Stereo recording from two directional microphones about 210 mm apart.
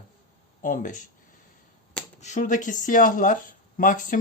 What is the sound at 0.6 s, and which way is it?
Speech, 40° left (ahead or behind).